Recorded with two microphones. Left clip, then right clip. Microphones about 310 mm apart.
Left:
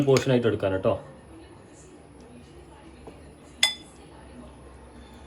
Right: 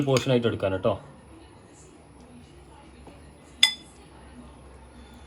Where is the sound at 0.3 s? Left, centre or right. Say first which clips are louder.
Left 1 dB; right.